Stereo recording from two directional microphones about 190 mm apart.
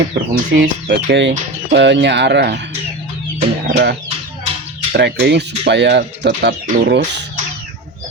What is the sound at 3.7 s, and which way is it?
Speech, 60° right (ahead or behind).